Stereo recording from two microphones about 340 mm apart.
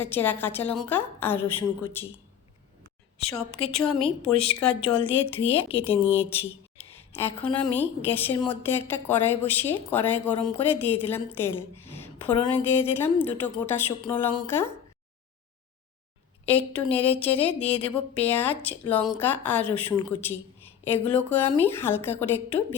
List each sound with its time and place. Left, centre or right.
0.0 s a woman's voice: centre
3.2 s a woman's voice: centre
16.5 s a woman's voice: centre